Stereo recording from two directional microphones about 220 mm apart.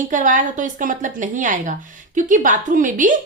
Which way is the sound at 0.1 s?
35° right (ahead or behind).